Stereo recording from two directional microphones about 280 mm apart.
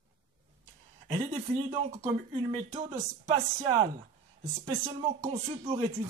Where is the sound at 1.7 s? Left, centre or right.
Centre.